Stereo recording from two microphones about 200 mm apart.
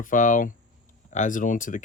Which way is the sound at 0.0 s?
40° left (ahead or behind).